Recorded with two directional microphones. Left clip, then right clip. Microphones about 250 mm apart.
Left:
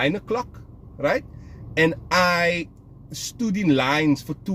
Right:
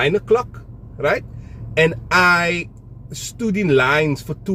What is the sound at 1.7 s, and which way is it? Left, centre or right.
Speech, centre.